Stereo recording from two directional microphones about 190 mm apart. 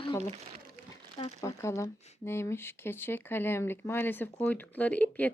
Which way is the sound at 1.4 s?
15° left (ahead or behind).